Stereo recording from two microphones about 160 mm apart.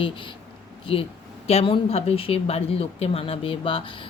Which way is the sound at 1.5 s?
40° left (ahead or behind).